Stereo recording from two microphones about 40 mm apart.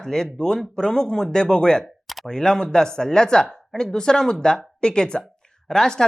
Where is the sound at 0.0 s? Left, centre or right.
Centre.